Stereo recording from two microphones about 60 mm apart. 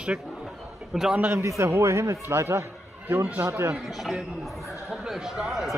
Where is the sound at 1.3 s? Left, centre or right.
Right.